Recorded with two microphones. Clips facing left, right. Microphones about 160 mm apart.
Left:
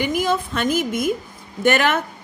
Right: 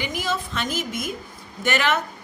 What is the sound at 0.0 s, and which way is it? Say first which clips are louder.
A woman's voice: left 7 dB; 50° left (ahead or behind).